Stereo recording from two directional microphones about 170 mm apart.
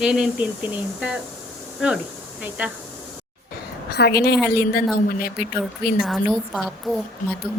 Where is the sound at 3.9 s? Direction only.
70° left (ahead or behind).